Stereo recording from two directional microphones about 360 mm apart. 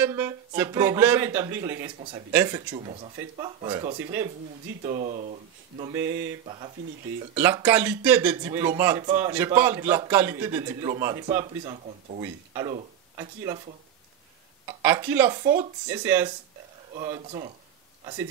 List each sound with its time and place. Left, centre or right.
0.0 s speech: centre
4.8 s speech: centre
14.7 s speech: centre